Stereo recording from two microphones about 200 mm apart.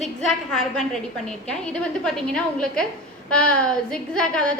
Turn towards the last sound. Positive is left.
turn(degrees=5)  # may be behind; listen again after turning